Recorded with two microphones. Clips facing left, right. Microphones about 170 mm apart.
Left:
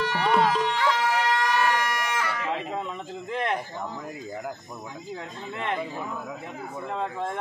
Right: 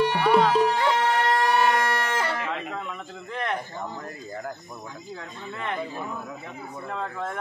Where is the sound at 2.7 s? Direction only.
25° left (ahead or behind).